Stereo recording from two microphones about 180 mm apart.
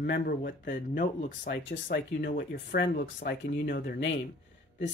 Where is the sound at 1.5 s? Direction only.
75° left (ahead or behind).